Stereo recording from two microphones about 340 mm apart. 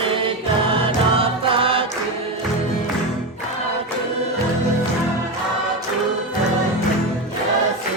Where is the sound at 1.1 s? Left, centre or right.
Centre.